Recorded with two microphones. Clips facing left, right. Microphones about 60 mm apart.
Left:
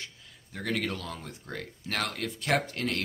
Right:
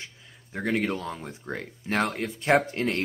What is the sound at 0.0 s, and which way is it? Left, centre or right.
Speech, right.